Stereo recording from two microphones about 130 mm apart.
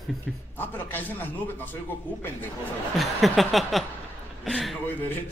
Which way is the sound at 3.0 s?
Centre (ahead or behind).